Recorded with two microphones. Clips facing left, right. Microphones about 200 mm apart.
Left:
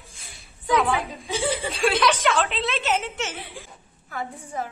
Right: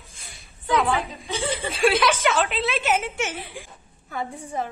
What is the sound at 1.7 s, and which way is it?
A woman's voice, centre (ahead or behind).